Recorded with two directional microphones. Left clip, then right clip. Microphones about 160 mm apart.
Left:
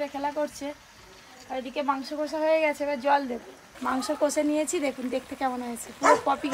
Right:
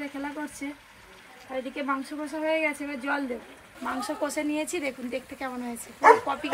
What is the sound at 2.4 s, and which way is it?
Speech, 50° left (ahead or behind).